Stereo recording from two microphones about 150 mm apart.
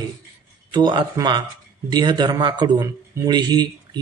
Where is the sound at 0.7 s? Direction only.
30° right (ahead or behind).